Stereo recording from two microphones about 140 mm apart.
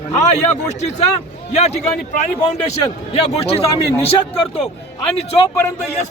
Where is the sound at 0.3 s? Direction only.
55° left (ahead or behind).